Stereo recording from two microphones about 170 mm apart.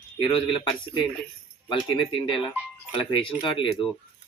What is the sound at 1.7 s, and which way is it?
Speech, 30° left (ahead or behind).